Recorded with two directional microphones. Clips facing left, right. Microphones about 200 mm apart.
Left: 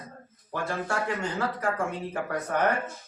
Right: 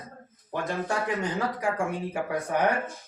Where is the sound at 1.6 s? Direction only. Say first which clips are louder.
Right 1 dB; 15° right (ahead or behind).